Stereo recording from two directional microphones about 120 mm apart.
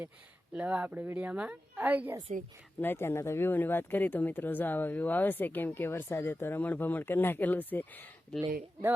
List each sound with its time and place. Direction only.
0.5 s speech: 10° right (ahead or behind)
2.8 s speech: 20° left (ahead or behind)